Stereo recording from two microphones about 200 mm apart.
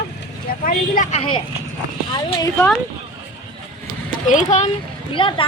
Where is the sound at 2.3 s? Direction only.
15° left (ahead or behind).